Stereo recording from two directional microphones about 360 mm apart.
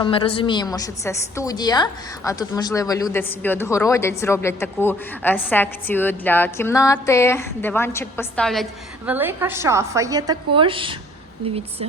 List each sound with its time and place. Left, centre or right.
0.0 s a woman's voice: centre